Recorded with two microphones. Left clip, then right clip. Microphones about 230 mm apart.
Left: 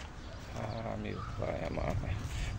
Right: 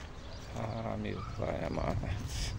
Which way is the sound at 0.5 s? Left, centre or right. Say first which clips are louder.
Right 1 dB; right.